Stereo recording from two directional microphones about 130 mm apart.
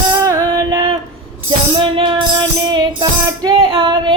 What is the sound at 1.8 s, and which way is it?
Music, 40° right (ahead or behind).